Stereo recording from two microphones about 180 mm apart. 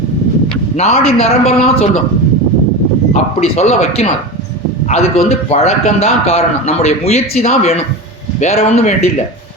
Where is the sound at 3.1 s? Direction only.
35° left (ahead or behind).